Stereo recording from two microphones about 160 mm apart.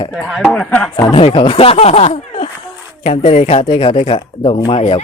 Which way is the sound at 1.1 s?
35° left (ahead or behind).